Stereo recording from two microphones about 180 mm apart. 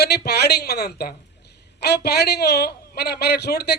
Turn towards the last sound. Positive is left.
turn(degrees=65)  # may be behind; listen again after turning